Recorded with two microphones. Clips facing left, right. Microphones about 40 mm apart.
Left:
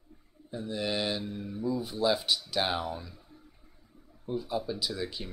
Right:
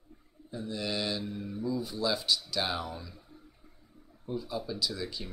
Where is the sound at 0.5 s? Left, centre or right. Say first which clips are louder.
Left 2 dB; centre.